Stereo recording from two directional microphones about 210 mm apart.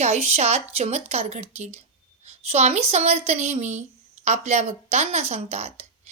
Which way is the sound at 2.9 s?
30° right (ahead or behind).